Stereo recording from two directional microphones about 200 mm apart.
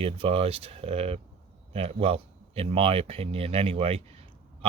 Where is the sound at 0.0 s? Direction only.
30° right (ahead or behind).